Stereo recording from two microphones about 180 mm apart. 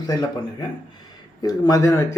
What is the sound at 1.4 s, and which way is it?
Speech, 20° left (ahead or behind).